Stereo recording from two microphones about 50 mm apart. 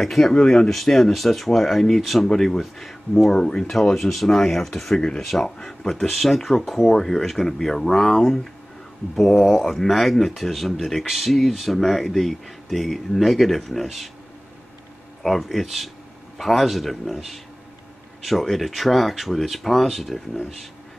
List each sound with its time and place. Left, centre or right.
0.0 s speech: centre
3.3 s speech: centre
3.6 s speech: centre
15.2 s speech: centre